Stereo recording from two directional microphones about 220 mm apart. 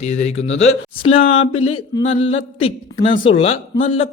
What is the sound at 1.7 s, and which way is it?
Speech, 20° left (ahead or behind).